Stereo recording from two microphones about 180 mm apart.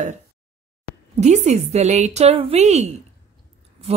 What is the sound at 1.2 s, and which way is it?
A woman's voice, 40° right (ahead or behind).